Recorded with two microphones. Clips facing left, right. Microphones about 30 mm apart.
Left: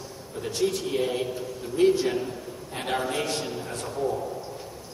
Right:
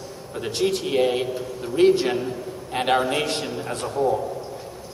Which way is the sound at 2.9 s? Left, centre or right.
Right.